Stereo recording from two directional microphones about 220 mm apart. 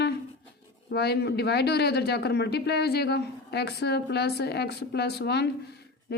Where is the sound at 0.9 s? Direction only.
50° left (ahead or behind).